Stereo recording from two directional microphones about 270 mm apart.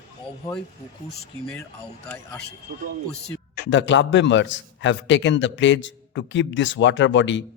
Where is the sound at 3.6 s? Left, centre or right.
Left.